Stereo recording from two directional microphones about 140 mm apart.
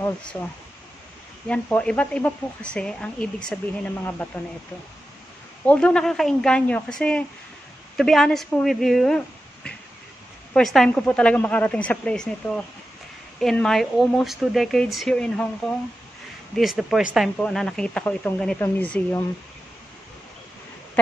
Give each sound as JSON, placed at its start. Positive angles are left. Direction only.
{"t": 0.0, "sound": "speech", "side_deg": 10}
{"t": 1.5, "sound": "a woman's voice", "side_deg": 10}
{"t": 5.7, "sound": "a woman's voice", "side_deg": 10}
{"t": 16.5, "sound": "a woman's voice", "side_deg": 0}